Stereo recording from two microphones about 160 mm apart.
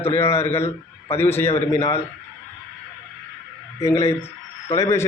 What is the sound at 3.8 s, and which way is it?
A man's voice, 20° left (ahead or behind).